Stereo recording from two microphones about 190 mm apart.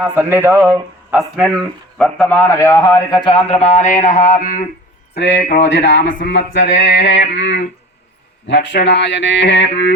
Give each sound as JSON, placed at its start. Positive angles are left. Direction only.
{"t": 0.0, "sound": "speech", "side_deg": -10}
{"t": 0.6, "sound": "speech", "side_deg": 0}
{"t": 3.5, "sound": "speech", "side_deg": 35}
{"t": 5.1, "sound": "speech", "side_deg": 65}